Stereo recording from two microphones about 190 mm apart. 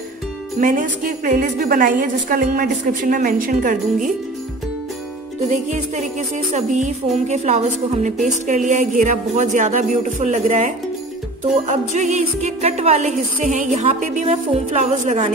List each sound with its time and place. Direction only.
0.6 s a woman's voice: 45° right (ahead or behind)
5.5 s speech: 40° right (ahead or behind)